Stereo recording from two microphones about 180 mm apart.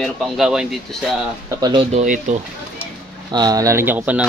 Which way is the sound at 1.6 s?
30° right (ahead or behind).